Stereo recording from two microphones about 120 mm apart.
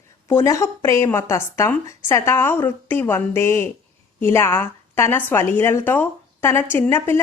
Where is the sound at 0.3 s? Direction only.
25° left (ahead or behind).